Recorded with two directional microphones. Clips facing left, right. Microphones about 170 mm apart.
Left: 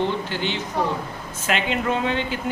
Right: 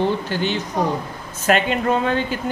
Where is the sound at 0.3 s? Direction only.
45° right (ahead or behind).